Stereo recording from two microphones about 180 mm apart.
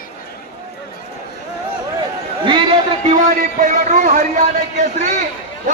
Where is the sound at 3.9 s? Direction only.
45° right (ahead or behind).